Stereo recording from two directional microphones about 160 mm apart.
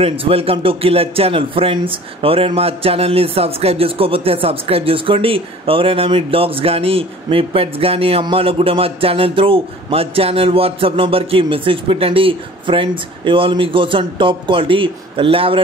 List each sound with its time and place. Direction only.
0.0 s speech: 35° right (ahead or behind)